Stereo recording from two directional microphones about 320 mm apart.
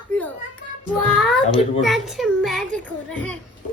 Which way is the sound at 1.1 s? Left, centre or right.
Centre.